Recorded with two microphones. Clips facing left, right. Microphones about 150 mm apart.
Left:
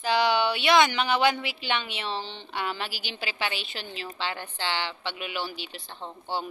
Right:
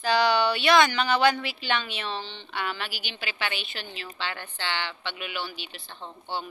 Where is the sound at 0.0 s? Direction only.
20° left (ahead or behind).